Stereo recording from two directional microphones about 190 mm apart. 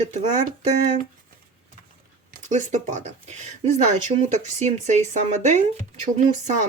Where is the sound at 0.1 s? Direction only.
40° right (ahead or behind).